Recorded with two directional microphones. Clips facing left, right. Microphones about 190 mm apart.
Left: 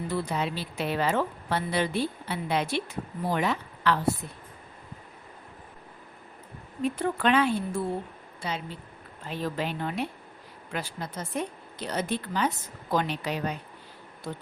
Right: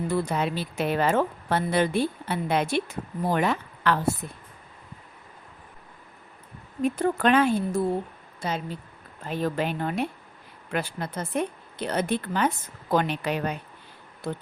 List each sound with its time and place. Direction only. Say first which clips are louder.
0.1 s a woman's voice: right 2 dB; 50° right (ahead or behind)
6.8 s a woman's voice: right 3 dB; 45° right (ahead or behind); by 14.4 s 60° right (ahead or behind)